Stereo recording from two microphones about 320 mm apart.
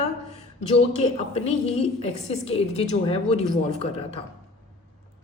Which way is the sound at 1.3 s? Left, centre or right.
Centre.